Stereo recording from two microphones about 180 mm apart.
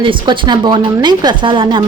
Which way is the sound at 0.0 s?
25° right (ahead or behind).